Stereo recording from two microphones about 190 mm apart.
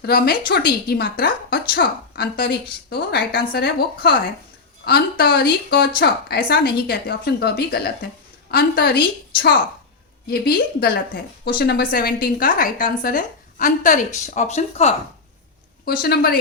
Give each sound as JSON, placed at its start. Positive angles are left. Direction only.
{"t": 0.0, "sound": "a woman's voice", "side_deg": 50}
{"t": 15.9, "sound": "speech", "side_deg": 55}